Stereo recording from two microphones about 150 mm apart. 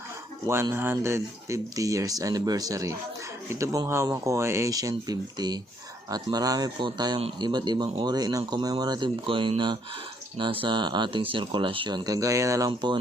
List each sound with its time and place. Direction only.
0.4 s speech: 20° right (ahead or behind)